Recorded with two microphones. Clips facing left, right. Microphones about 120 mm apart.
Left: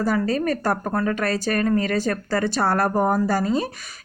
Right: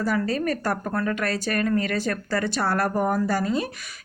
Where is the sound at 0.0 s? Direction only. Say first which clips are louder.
Left 3 dB; 40° left (ahead or behind).